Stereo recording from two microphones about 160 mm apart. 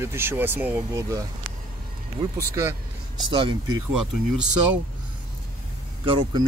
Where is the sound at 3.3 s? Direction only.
30° right (ahead or behind).